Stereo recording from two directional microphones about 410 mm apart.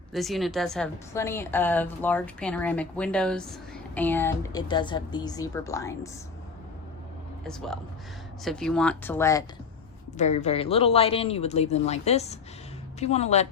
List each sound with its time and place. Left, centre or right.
0.1 s a woman's voice: centre
7.4 s a woman's voice: centre